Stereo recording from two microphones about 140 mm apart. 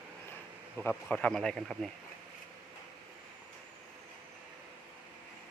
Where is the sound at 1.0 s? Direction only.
5° left (ahead or behind).